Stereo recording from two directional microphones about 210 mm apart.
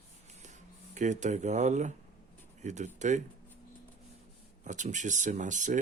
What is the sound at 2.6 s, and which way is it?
Speech, 35° right (ahead or behind).